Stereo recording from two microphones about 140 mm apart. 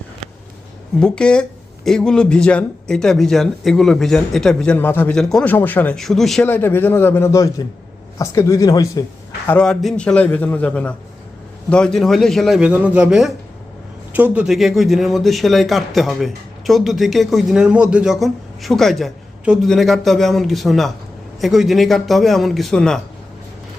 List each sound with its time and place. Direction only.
0.9 s speech: 5° left (ahead or behind)
6.4 s a man's voice: 15° left (ahead or behind)
9.5 s a man's voice: 5° left (ahead or behind)